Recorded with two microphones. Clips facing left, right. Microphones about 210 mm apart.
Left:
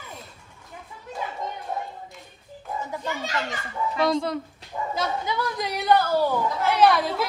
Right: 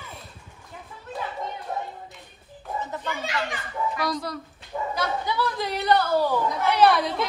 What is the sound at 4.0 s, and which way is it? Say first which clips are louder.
Speech: left 6 dB; 25° left (ahead or behind).